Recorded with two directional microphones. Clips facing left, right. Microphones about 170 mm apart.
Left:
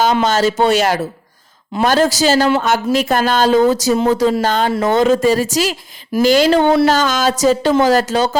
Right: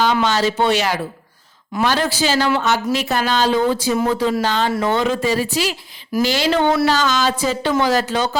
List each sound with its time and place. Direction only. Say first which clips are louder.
0.0 s speech: left 3 dB; 45° left (ahead or behind)